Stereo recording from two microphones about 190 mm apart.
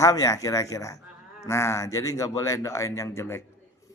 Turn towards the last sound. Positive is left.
turn(degrees=15)  # may be behind; listen again after turning